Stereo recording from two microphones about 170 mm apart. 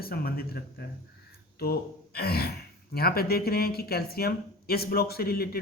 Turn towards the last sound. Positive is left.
turn(degrees=65)  # may be behind; listen again after turning